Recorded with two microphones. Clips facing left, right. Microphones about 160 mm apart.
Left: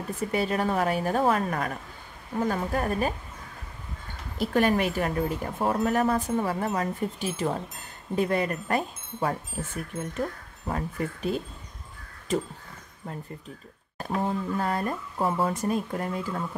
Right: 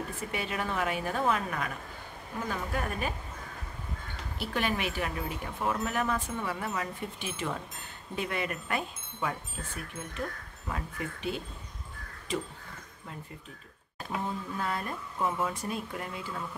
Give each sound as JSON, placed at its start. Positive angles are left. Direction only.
{"t": 0.2, "sound": "speech", "side_deg": 40}
{"t": 4.4, "sound": "speech", "side_deg": 45}
{"t": 10.7, "sound": "speech", "side_deg": 40}
{"t": 13.9, "sound": "speech", "side_deg": 45}